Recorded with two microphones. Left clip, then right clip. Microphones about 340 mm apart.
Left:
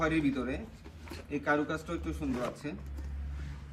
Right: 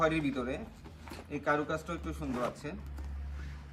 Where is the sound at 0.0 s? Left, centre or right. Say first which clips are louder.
Even; centre.